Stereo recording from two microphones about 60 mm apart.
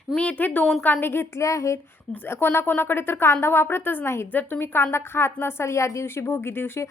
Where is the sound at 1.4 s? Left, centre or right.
Left.